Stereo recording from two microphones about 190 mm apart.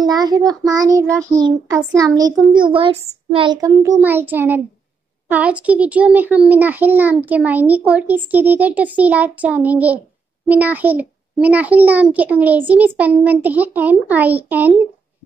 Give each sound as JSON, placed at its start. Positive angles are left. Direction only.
{"t": 0.0, "sound": "child singing", "side_deg": -20}
{"t": 3.3, "sound": "a child's voice", "side_deg": -25}